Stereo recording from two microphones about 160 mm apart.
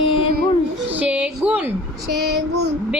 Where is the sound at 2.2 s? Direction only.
90° right.